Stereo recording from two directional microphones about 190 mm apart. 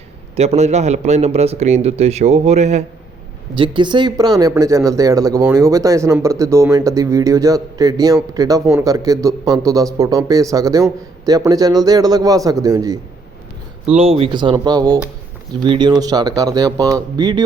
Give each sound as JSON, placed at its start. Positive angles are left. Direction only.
{"t": 0.3, "sound": "speech", "side_deg": -35}
{"t": 3.5, "sound": "speech", "side_deg": -25}
{"t": 13.8, "sound": "speech", "side_deg": -30}